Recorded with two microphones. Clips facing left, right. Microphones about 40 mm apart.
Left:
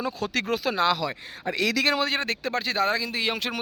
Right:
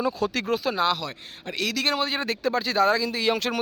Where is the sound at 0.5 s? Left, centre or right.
Left.